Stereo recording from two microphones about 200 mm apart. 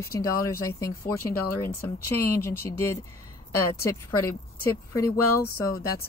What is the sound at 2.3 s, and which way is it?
Speech, 10° left (ahead or behind).